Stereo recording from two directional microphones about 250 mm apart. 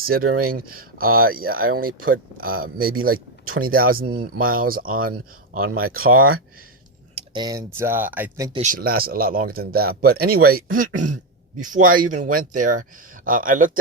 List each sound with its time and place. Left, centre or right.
0.0 s speech: right
7.2 s speech: centre
8.5 s speech: right